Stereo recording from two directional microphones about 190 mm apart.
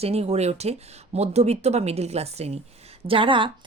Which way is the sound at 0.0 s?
35° right (ahead or behind).